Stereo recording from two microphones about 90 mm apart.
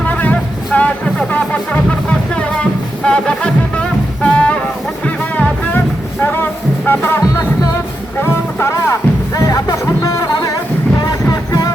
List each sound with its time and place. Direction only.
0.0 s music: 15° left (ahead or behind)
6.2 s music: 25° left (ahead or behind); by 11.7 s 45° left (ahead or behind)